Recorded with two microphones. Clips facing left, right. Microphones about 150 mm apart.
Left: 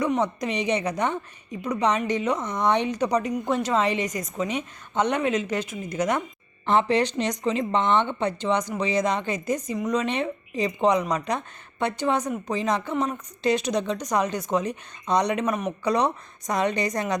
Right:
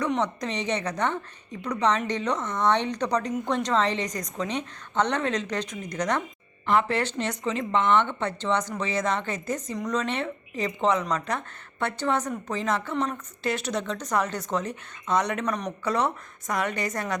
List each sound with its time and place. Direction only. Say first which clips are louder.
0.0 s speech: left 2 dB; 10° left (ahead or behind)
6.7 s speech: left 3 dB; 20° left (ahead or behind)